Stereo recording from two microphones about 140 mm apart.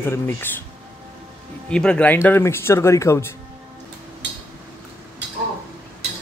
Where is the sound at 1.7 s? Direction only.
5° left (ahead or behind).